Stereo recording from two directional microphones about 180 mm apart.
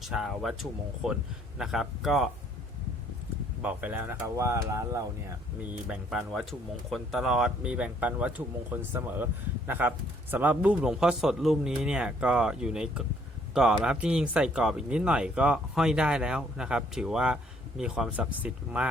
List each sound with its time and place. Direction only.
0.0 s speech: centre (ahead or behind)
3.6 s speech: 10° right (ahead or behind)
5.9 s speech: 5° right (ahead or behind)